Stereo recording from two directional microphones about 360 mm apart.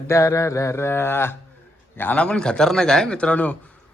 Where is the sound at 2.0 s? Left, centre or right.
Centre.